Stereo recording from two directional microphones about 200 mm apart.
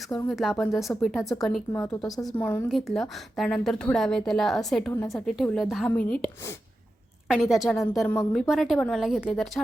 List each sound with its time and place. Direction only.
0.3 s a woman's voice: centre (ahead or behind)
1.7 s a woman's voice: 15° left (ahead or behind)
2.6 s a woman's voice: centre (ahead or behind)
4.9 s a woman's voice: 10° left (ahead or behind)
5.1 s a woman's voice: centre (ahead or behind)